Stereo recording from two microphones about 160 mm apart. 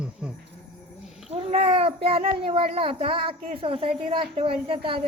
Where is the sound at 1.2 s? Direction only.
40° right (ahead or behind).